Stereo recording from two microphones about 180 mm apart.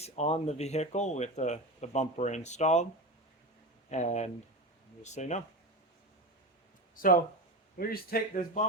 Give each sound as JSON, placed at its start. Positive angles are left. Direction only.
{"t": 0.0, "sound": "speech", "side_deg": 35}
{"t": 3.8, "sound": "speech", "side_deg": 40}
{"t": 6.9, "sound": "a man's voice", "side_deg": 50}